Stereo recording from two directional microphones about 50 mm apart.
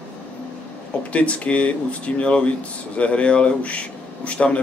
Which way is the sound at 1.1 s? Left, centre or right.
Left.